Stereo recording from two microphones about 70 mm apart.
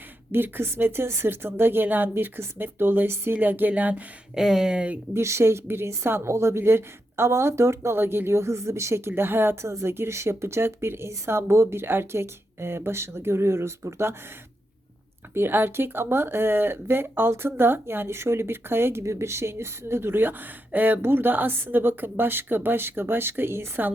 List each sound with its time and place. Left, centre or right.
0.3 s a woman's voice: right
4.4 s speech: centre
5.1 s a woman's voice: right
15.4 s a woman's voice: right